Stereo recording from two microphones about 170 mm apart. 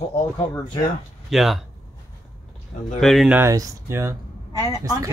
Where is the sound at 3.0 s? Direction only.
Centre (ahead or behind).